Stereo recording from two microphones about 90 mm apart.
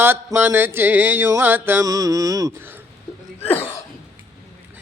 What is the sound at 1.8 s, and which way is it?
Mantra, 40° right (ahead or behind).